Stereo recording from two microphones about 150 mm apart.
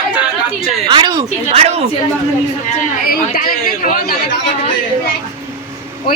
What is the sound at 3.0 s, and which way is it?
A man's voice, 80° left.